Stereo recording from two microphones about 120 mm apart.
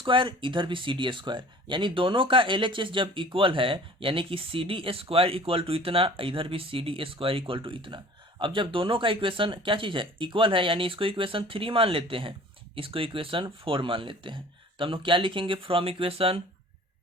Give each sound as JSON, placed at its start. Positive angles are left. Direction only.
{"t": 0.0, "sound": "speech", "side_deg": -45}